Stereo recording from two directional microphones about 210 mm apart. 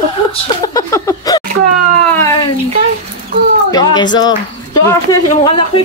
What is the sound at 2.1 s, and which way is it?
Cat, 10° left (ahead or behind).